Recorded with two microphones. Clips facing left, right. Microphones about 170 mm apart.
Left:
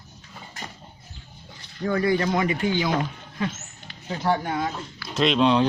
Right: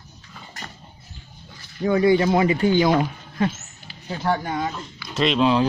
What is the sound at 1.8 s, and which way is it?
Speech, 20° right (ahead or behind).